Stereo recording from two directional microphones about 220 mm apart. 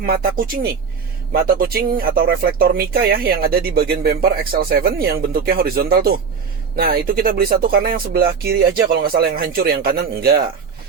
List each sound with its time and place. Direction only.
0.0 s speech: 40° right (ahead or behind)